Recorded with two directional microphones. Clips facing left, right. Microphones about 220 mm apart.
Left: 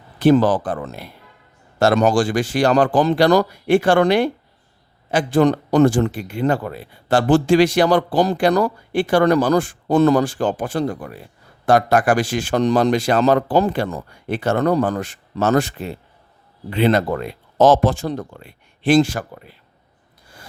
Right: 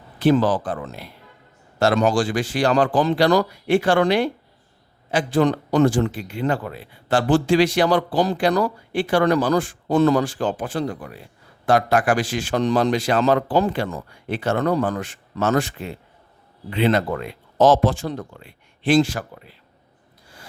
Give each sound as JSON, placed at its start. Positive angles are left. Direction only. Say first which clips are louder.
{"t": 0.2, "sound": "speech", "louder": "left 3 dB", "side_deg": 45}